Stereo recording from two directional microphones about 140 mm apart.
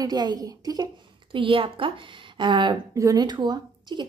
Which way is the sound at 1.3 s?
40° right (ahead or behind).